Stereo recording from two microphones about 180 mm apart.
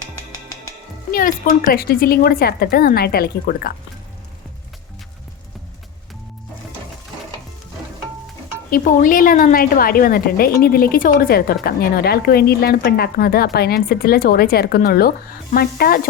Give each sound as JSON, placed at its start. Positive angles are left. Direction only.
{"t": 1.1, "sound": "speech", "side_deg": 50}
{"t": 8.7, "sound": "a woman's voice", "side_deg": 50}